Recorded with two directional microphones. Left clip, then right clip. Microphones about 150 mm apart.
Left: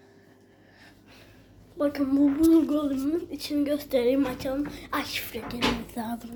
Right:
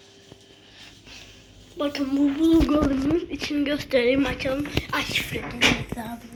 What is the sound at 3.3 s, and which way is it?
Speech, 15° left (ahead or behind).